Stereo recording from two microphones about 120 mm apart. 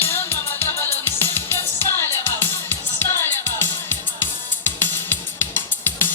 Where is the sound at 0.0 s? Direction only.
20° left (ahead or behind).